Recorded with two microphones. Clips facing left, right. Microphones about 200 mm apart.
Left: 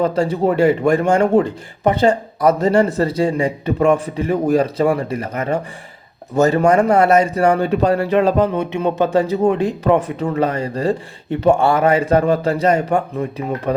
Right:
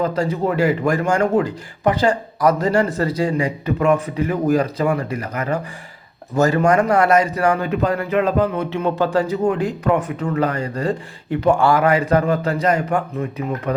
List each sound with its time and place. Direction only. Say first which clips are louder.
0.0 s speech: left 3 dB; 25° left (ahead or behind)